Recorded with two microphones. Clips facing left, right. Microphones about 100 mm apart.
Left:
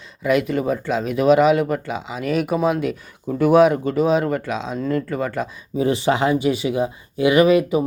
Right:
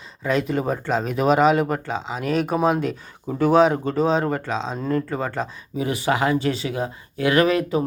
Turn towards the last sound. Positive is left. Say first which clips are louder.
# left 4 dB
turn(degrees=15)  # may be behind; listen again after turning